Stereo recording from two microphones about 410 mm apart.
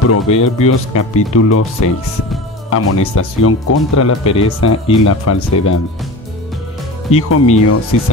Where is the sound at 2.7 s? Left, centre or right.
Left.